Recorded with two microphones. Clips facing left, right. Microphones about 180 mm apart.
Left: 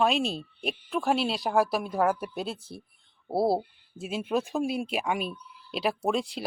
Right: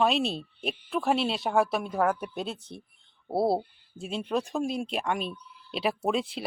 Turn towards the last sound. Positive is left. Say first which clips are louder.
# even
turn(degrees=0)  # may be behind; listen again after turning